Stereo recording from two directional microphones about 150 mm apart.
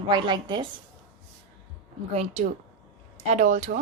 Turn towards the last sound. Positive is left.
turn(degrees=-55)  # may be behind; listen again after turning